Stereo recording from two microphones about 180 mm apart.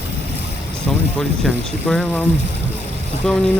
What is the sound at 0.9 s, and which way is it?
Speech, 5° left (ahead or behind).